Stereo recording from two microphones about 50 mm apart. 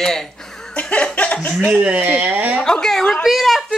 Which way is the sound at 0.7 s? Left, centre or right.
Left.